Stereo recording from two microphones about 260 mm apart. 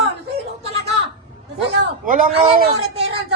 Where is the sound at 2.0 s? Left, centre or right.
Right.